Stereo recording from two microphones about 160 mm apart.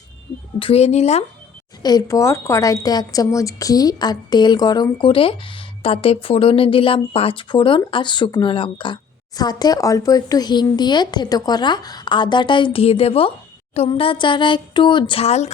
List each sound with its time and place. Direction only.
0.6 s speech: 40° left (ahead or behind)
1.8 s speech: 25° left (ahead or behind); by 15.5 s 45° left (ahead or behind)